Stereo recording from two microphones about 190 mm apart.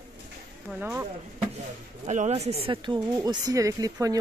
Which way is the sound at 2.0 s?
35° right (ahead or behind).